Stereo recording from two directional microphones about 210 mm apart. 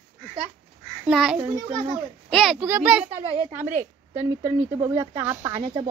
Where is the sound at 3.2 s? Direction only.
25° right (ahead or behind).